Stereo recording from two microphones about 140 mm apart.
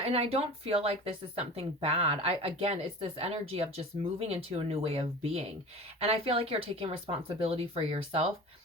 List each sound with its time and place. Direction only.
0.0 s speech: 45° right (ahead or behind)